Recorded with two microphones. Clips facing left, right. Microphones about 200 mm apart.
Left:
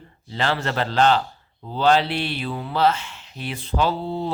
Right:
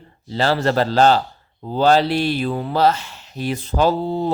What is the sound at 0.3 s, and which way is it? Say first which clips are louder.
Speech: right 6 dB; 35° right (ahead or behind).